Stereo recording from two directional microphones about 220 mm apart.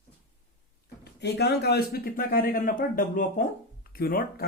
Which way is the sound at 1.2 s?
50° left (ahead or behind).